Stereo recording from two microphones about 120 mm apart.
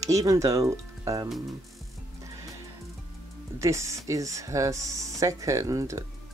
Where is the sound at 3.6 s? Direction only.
25° right (ahead or behind).